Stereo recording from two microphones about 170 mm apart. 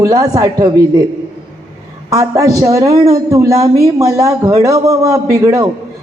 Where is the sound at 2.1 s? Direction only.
20° right (ahead or behind).